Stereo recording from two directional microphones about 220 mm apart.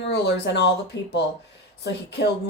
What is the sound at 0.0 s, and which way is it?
A woman's voice, 50° left (ahead or behind).